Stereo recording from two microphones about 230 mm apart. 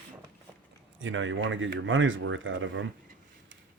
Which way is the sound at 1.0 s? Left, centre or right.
Right.